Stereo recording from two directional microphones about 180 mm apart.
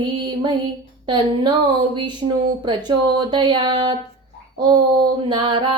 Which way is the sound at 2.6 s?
25° right (ahead or behind).